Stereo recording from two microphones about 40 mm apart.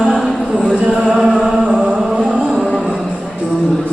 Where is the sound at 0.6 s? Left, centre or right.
Centre.